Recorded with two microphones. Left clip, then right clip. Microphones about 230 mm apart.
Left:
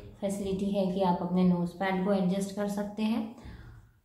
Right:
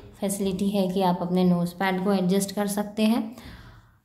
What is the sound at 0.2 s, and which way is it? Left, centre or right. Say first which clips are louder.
A woman's voice: right 5 dB; right.